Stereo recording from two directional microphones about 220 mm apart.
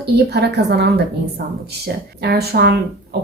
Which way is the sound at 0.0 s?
50° right (ahead or behind).